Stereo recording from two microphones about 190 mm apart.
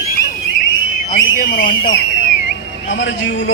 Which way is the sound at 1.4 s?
50° left (ahead or behind).